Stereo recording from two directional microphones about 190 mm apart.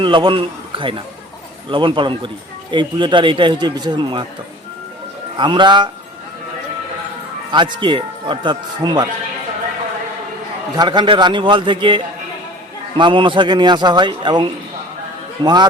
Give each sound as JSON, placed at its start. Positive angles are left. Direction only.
{"t": 0.0, "sound": "speech", "side_deg": -25}
{"t": 5.4, "sound": "speech", "side_deg": -25}
{"t": 7.5, "sound": "speech", "side_deg": -25}
{"t": 10.8, "sound": "speech", "side_deg": -25}